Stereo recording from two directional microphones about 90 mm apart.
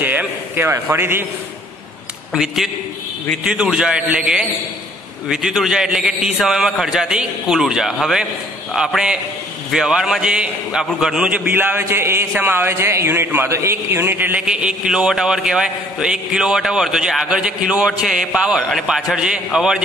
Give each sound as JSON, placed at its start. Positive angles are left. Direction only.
{"t": 0.0, "sound": "a sound", "side_deg": -20}
{"t": 0.9, "sound": "a man's voice", "side_deg": -25}
{"t": 2.3, "sound": "a man's voice", "side_deg": -5}
{"t": 11.4, "sound": "a man's voice", "side_deg": -25}
{"t": 14.4, "sound": "a man's voice", "side_deg": -10}